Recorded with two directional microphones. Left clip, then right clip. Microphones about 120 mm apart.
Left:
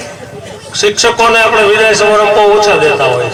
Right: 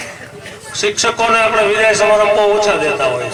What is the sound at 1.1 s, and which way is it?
A man's voice, 10° right (ahead or behind).